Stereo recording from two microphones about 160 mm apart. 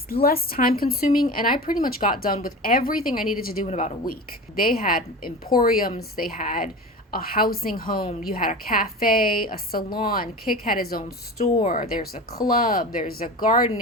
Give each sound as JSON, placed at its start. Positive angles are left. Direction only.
{"t": 0.1, "sound": "a woman's voice", "side_deg": 70}
{"t": 3.7, "sound": "a woman's voice", "side_deg": 45}
{"t": 4.0, "sound": "a woman's voice", "side_deg": 65}